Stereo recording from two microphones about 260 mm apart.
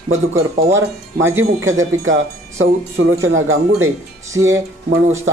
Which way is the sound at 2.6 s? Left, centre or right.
Right.